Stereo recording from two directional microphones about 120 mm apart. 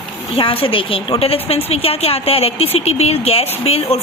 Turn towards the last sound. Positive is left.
turn(degrees=60)  # may be behind; listen again after turning